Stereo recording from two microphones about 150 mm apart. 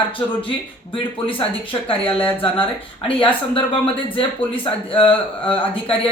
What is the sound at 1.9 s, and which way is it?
Speech, 35° left (ahead or behind).